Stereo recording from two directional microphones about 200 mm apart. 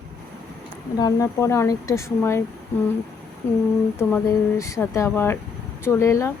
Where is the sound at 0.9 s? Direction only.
20° left (ahead or behind).